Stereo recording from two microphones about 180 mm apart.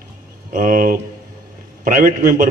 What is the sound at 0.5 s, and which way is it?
A man's voice, 50° right (ahead or behind).